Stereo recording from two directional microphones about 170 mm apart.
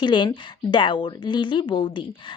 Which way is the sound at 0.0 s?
25° left (ahead or behind).